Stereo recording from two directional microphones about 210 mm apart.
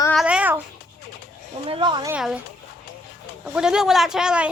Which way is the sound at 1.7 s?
25° right (ahead or behind).